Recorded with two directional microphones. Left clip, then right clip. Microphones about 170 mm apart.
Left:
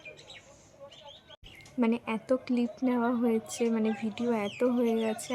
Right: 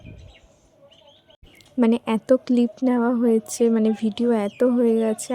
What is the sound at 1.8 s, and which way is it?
A woman's voice, 50° right (ahead or behind).